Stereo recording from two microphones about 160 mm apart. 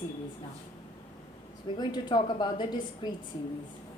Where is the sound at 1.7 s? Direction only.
30° left (ahead or behind).